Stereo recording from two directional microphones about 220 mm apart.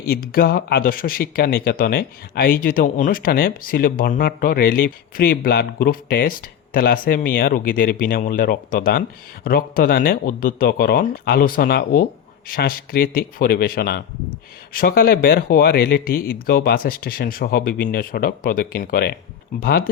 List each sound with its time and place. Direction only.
0.0 s speech: 40° left (ahead or behind)